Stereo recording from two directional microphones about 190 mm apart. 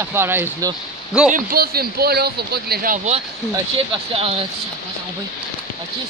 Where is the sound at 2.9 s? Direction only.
35° right (ahead or behind).